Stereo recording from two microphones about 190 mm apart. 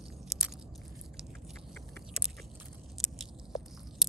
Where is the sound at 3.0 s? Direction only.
Centre (ahead or behind).